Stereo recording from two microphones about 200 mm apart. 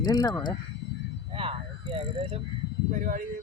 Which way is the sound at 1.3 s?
30° right (ahead or behind).